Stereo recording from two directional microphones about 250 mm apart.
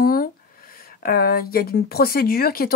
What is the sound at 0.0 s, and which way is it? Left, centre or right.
Speech, left.